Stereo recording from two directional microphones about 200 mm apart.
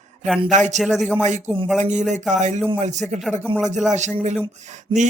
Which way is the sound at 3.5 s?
25° right (ahead or behind).